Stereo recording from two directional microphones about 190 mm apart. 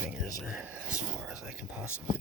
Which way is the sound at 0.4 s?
5° right (ahead or behind).